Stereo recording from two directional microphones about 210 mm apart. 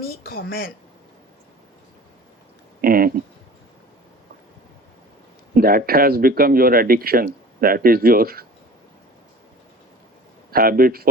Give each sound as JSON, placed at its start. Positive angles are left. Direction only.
{"t": 0.3, "sound": "speech", "side_deg": 45}
{"t": 2.8, "sound": "speech", "side_deg": -45}
{"t": 5.5, "sound": "speech", "side_deg": -45}
{"t": 10.5, "sound": "speech", "side_deg": -45}